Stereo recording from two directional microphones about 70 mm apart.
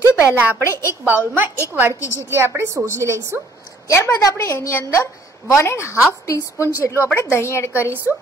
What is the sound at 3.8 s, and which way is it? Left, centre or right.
A woman's voice, left.